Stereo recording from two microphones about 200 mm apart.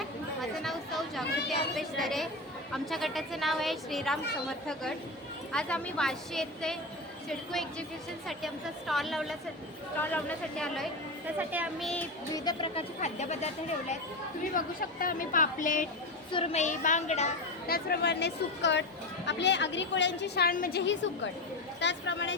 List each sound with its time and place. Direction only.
0.6 s chatter: centre (ahead or behind)
2.0 s a woman's voice: centre (ahead or behind)
8.9 s a woman's voice: centre (ahead or behind)
11.3 s a woman's voice: 5° right (ahead or behind)
12.5 s speech: 25° left (ahead or behind)
14.5 s a woman's voice: 45° left (ahead or behind)
16.3 s speech: 30° left (ahead or behind)
17.7 s speech: 50° left (ahead or behind)
20.8 s speech: 65° left (ahead or behind)